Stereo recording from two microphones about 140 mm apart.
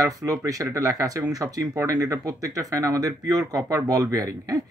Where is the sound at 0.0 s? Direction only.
25° right (ahead or behind).